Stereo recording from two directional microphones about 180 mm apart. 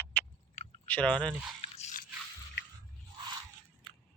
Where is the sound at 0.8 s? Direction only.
10° left (ahead or behind).